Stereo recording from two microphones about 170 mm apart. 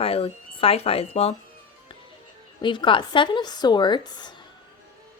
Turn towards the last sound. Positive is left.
turn(degrees=25)  # may be behind; listen again after turning